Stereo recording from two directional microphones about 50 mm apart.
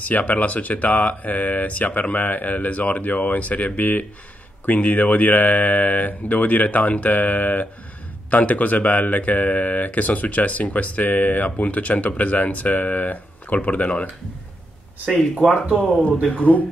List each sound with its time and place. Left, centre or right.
0.0 s speech: left
15.0 s speech: centre
16.3 s speech: left